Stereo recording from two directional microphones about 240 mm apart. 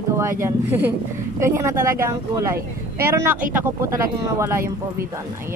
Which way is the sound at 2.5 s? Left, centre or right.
Right.